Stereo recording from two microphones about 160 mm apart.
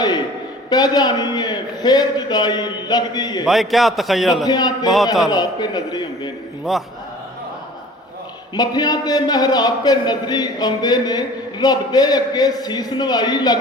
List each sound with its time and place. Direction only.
0.7 s a man's voice: 25° left (ahead or behind)
3.4 s a man's voice: centre (ahead or behind)
4.4 s a man's voice: 25° left (ahead or behind)
6.7 s a man's voice: centre (ahead or behind)
8.5 s a man's voice: 25° left (ahead or behind)